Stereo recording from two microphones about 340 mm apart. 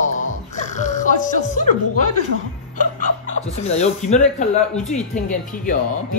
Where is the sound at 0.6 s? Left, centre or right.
Left.